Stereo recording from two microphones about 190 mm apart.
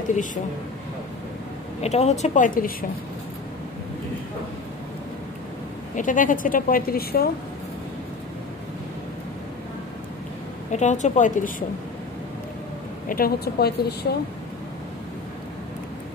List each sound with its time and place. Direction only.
0.1 s speech: 40° left (ahead or behind)
1.8 s a woman's voice: 35° left (ahead or behind)
5.9 s speech: 45° left (ahead or behind)
10.7 s a woman's voice: 40° left (ahead or behind)
13.1 s a woman's voice: 55° left (ahead or behind)